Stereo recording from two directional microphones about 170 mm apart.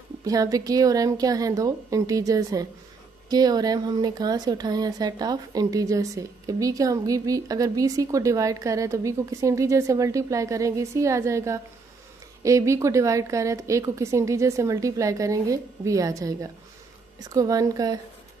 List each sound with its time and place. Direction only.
0.2 s a woman's voice: 20° right (ahead or behind)